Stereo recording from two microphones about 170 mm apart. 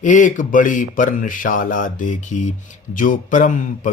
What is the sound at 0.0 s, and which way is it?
Mantra, 50° left (ahead or behind).